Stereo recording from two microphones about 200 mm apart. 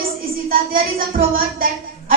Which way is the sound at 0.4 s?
45° right (ahead or behind).